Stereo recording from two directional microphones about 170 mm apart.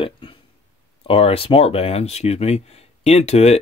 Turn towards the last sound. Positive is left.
turn(degrees=40)  # may be behind; listen again after turning